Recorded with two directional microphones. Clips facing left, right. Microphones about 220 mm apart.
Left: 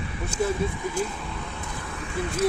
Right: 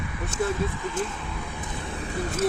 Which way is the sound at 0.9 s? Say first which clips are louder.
Left 1 dB; centre (ahead or behind).